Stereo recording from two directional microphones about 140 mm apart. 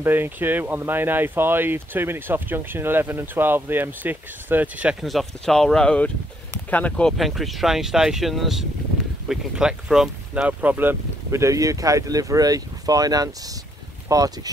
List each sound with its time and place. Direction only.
0.0 s speech: 15° right (ahead or behind)
5.0 s speech: centre (ahead or behind); by 14.5 s 25° right (ahead or behind)